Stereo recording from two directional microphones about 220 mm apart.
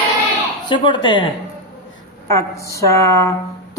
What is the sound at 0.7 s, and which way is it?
Speech, 20° left (ahead or behind).